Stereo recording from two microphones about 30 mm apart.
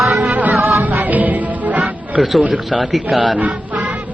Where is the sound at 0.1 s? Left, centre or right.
Right.